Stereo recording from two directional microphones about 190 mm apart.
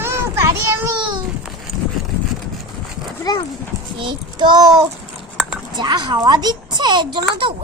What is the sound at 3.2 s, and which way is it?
Speech, 20° left (ahead or behind).